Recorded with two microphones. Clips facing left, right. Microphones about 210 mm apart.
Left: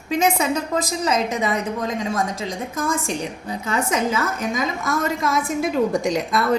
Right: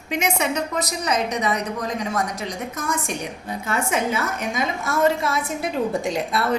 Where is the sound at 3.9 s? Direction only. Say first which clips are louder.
Left 1 dB; 90° left.